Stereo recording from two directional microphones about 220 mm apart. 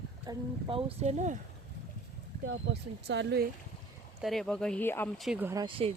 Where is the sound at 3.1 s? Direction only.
50° right (ahead or behind).